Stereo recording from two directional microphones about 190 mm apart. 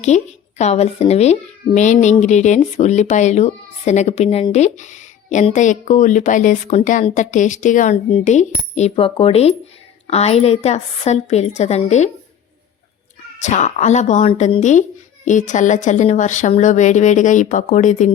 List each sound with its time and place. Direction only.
0.0 s speech: 35° left (ahead or behind)
13.4 s speech: 40° left (ahead or behind)